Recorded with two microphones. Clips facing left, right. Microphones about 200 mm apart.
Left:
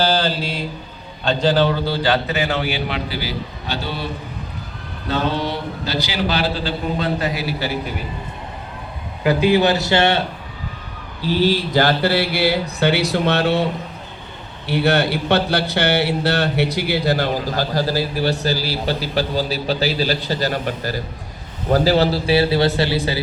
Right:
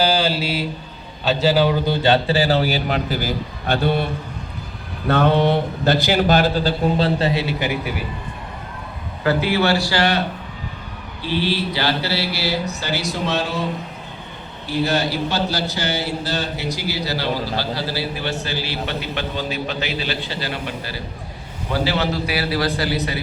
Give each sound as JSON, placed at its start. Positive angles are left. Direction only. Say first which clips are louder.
{"t": 0.0, "sound": "mantra", "louder": "even", "side_deg": -10}
{"t": 1.2, "sound": "a man's voice", "louder": "even", "side_deg": -5}
{"t": 9.2, "sound": "a man's voice", "louder": "left 3 dB", "side_deg": 15}
{"t": 11.2, "sound": "mantra", "louder": "left 4 dB", "side_deg": 40}
{"t": 14.7, "sound": "a man's voice", "louder": "left 3 dB", "side_deg": 65}